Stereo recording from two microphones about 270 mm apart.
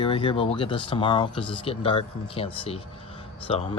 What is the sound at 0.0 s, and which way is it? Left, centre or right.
Speech, centre.